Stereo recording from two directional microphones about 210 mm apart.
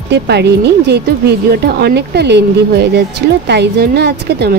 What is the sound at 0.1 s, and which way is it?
Speech, 55° right (ahead or behind).